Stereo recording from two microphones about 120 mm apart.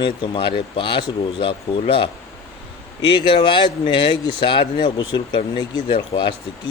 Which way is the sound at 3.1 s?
40° left (ahead or behind).